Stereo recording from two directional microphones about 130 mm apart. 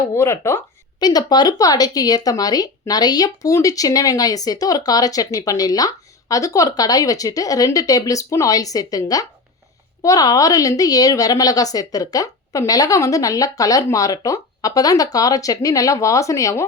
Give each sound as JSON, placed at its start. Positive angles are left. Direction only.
{"t": 0.1, "sound": "speech", "side_deg": 20}
{"t": 0.9, "sound": "speech", "side_deg": 30}